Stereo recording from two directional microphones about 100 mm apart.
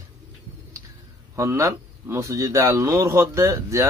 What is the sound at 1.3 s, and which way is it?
Speech, 30° right (ahead or behind).